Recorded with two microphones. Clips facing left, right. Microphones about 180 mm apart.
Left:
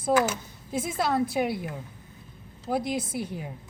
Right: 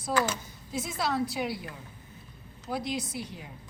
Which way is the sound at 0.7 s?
50° left (ahead or behind).